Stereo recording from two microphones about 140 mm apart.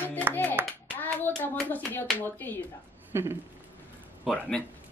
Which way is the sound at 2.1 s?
15° left (ahead or behind).